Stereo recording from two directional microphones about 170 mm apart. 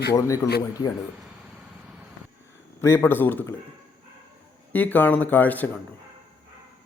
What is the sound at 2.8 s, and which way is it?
Speech, 15° left (ahead or behind).